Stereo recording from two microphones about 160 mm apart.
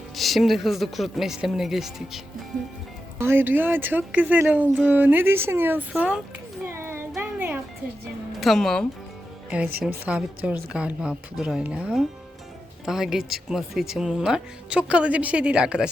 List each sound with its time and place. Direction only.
0.2 s speech: centre (ahead or behind)
3.2 s speech: 15° right (ahead or behind)
6.7 s child singing: 15° right (ahead or behind)
7.2 s music: 10° right (ahead or behind)
8.4 s speech: centre (ahead or behind)